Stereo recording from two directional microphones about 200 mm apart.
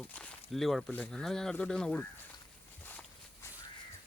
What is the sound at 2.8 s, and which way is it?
Walk, 10° left (ahead or behind).